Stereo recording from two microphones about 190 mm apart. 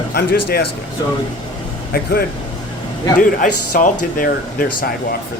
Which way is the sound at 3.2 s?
45° left (ahead or behind).